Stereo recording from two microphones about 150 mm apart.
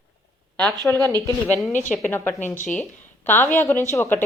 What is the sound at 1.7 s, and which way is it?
Speech, 55° left (ahead or behind).